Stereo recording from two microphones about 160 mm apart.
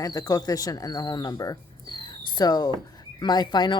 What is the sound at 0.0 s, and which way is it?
A woman's voice, 20° left (ahead or behind).